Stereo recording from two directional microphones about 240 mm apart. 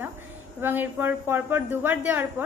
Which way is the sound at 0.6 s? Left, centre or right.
Centre.